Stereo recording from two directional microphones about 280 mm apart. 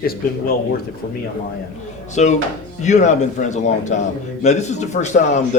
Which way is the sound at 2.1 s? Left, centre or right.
Left.